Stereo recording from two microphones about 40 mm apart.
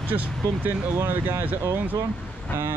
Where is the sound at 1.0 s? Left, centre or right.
Right.